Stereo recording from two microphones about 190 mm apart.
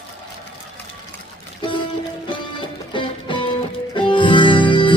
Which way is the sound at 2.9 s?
25° left (ahead or behind).